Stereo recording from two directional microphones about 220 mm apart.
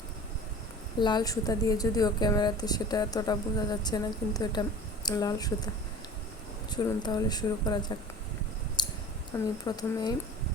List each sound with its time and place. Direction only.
0.9 s a woman's voice: 20° left (ahead or behind)
8.8 s clicking: 20° left (ahead or behind)
9.3 s a woman's voice: 20° left (ahead or behind)